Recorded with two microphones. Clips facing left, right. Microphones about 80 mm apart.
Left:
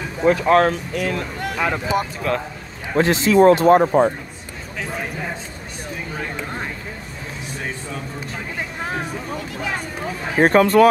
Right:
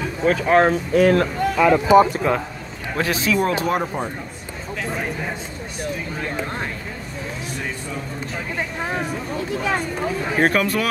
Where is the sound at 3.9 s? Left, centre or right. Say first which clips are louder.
Left 11 dB; left.